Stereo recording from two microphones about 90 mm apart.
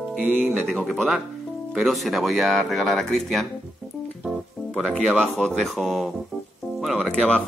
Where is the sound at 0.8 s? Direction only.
Centre (ahead or behind).